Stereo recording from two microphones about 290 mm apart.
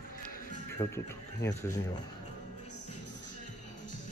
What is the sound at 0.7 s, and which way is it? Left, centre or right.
Speech, centre.